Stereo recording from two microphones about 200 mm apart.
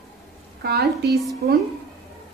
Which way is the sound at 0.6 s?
50° right (ahead or behind).